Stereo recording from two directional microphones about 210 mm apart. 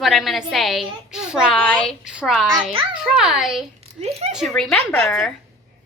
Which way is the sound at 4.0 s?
30° right (ahead or behind).